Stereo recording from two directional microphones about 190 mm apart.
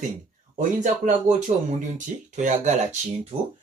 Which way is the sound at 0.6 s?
40° right (ahead or behind).